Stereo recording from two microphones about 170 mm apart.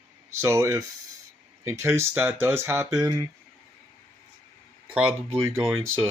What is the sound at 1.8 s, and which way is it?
Speech, 15° right (ahead or behind).